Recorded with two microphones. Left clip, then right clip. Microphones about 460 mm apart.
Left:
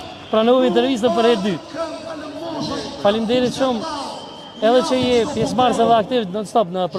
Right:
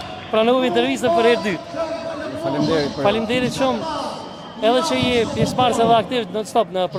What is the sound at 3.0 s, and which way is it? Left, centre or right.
A man's voice, left.